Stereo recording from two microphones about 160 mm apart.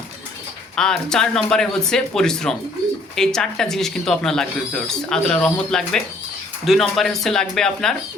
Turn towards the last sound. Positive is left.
turn(degrees=5)  # may be behind; listen again after turning